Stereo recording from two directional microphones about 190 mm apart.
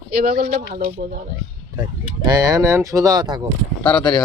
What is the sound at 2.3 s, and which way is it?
Speech, 20° right (ahead or behind).